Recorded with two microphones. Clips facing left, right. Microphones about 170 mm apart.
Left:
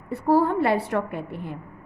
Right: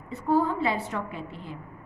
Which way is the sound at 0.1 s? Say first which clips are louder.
Left 4 dB; 65° left (ahead or behind).